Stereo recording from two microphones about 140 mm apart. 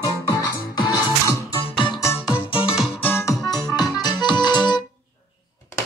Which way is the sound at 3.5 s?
30° left (ahead or behind).